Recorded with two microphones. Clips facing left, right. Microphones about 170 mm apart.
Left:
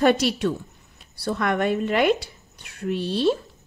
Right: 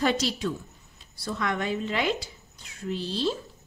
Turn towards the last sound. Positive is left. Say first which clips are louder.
# left 7 dB
turn(degrees=60)  # may be behind; listen again after turning